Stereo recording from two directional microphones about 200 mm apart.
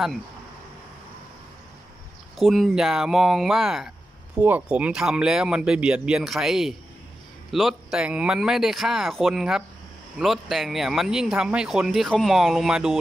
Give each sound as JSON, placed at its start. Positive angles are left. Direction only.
{"t": 2.3, "sound": "speech", "side_deg": 0}